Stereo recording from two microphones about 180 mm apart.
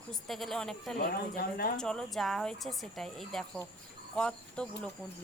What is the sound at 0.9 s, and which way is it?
Speech, 55° left (ahead or behind).